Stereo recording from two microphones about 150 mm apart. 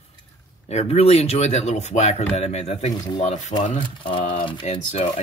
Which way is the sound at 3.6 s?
55° left (ahead or behind).